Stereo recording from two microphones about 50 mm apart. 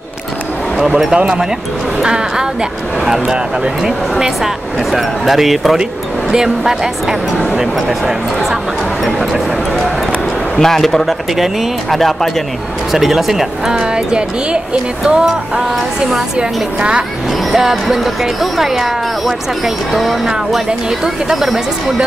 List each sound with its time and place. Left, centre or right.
0.7 s speech: centre
1.1 s a woman's voice: centre
4.9 s speech: centre
9.0 s a woman's voice: centre; by 17.0 s right
17.5 s music: centre
17.9 s speech: centre